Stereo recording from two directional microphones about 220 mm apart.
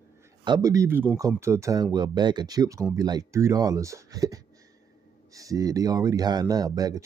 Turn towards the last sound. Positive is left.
turn(degrees=-15)  # may be behind; listen again after turning